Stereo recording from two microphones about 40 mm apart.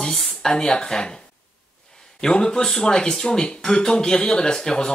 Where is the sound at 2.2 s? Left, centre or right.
Centre.